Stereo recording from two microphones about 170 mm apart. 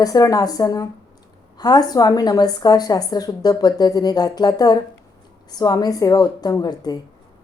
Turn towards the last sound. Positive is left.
turn(degrees=25)  # may be behind; listen again after turning